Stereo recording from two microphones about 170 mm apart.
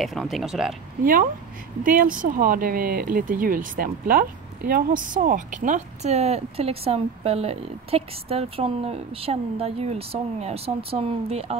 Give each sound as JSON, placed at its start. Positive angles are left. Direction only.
{"t": 0.0, "sound": "speech", "side_deg": 0}
{"t": 1.8, "sound": "speech", "side_deg": -55}